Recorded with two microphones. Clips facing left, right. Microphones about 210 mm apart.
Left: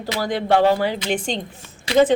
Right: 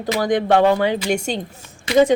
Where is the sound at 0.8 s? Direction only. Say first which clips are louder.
Right 3 dB; 15° right (ahead or behind).